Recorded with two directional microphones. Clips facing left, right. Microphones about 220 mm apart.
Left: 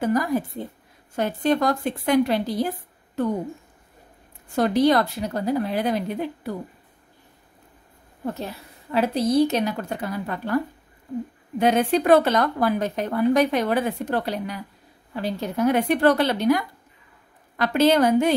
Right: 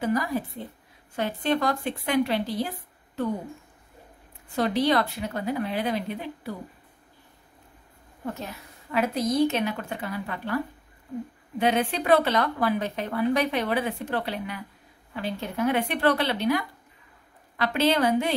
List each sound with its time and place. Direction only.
0.0 s a woman's voice: 45° left (ahead or behind)
4.6 s a woman's voice: 45° left (ahead or behind)
8.4 s a woman's voice: 35° left (ahead or behind)